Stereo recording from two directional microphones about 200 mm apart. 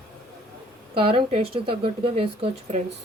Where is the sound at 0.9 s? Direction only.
25° right (ahead or behind).